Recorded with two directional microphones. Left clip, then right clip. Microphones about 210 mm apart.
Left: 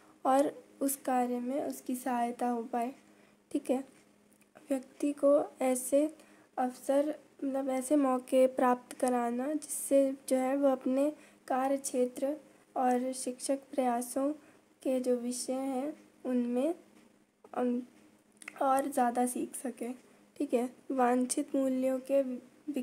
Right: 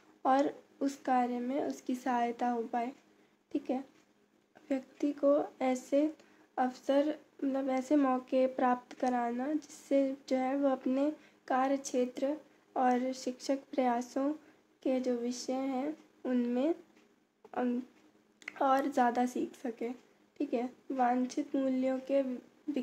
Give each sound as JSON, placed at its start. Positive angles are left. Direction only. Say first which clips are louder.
{"t": 0.2, "sound": "a woman's voice", "louder": "left 1 dB", "side_deg": 20}